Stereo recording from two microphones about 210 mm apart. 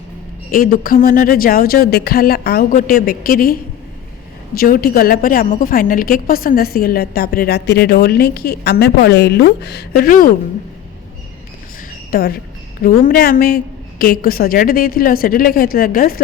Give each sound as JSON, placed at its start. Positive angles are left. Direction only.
{"t": 0.5, "sound": "a woman's voice", "side_deg": 45}
{"t": 12.1, "sound": "a woman's voice", "side_deg": 45}